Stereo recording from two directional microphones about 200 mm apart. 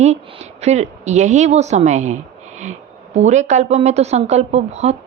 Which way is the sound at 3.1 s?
35° right (ahead or behind).